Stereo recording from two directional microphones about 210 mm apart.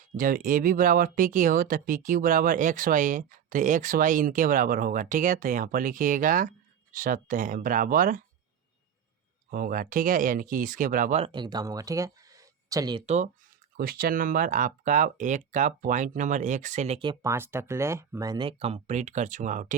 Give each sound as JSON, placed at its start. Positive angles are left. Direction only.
{"t": 0.2, "sound": "speech", "side_deg": -40}
{"t": 9.5, "sound": "speech", "side_deg": -45}
{"t": 11.3, "sound": "speech", "side_deg": -20}
{"t": 13.1, "sound": "speech", "side_deg": -35}